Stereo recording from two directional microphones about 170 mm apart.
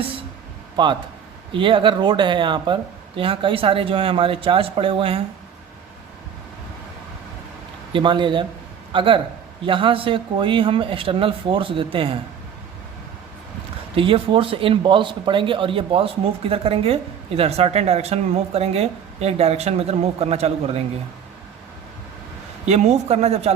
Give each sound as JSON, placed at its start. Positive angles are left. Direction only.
{"t": 0.8, "sound": "speech", "side_deg": -25}
{"t": 7.9, "sound": "speech", "side_deg": -30}
{"t": 13.9, "sound": "speech", "side_deg": -30}
{"t": 22.6, "sound": "speech", "side_deg": -40}